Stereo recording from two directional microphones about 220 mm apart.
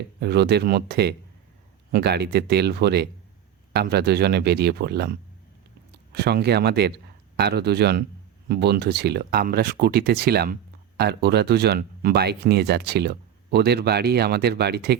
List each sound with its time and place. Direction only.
0.2 s speech: 50° right (ahead or behind)
6.1 s speech: 50° right (ahead or behind)